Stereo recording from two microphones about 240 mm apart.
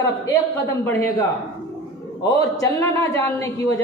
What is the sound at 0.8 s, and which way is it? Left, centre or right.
Speech, centre.